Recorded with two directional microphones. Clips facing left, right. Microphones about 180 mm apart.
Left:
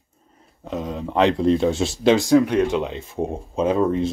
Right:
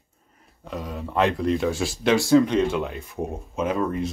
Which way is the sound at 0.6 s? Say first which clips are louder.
Left 5 dB; 20° left (ahead or behind).